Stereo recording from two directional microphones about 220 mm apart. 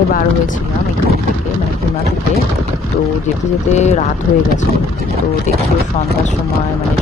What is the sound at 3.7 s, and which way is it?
Speech, 30° left (ahead or behind).